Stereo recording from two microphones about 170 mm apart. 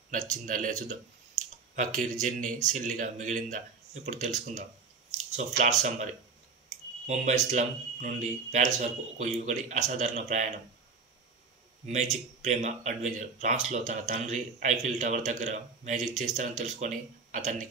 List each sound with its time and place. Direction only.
0.3 s speech: 50° right (ahead or behind)
2.0 s speech: 45° right (ahead or behind)
7.1 s speech: 45° right (ahead or behind)
11.8 s speech: 45° right (ahead or behind)